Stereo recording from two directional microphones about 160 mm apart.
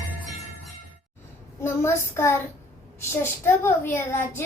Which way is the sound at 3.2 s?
15° left (ahead or behind).